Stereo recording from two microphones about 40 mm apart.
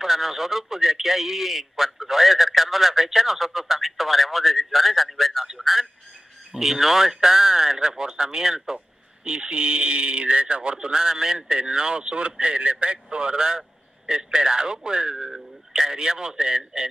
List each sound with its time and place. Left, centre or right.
0.0 s a man's voice: centre
5.6 s music: centre
6.5 s speech: centre
15.2 s a man's voice: centre